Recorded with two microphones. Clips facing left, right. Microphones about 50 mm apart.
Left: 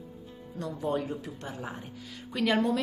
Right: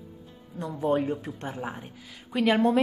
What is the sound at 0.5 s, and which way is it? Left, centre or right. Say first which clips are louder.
Speech: right 5 dB; right.